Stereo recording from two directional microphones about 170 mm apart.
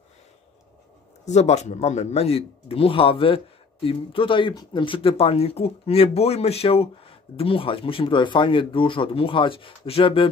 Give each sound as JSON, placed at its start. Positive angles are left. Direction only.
{"t": 1.2, "sound": "speech", "side_deg": 40}